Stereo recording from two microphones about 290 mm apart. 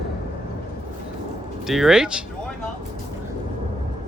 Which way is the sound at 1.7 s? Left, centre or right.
Centre.